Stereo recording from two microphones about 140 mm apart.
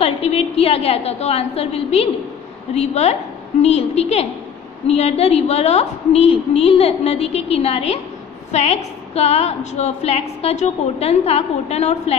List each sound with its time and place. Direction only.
0.0 s a woman's voice: 45° left (ahead or behind)